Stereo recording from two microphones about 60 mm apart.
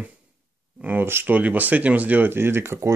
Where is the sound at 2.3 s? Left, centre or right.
Right.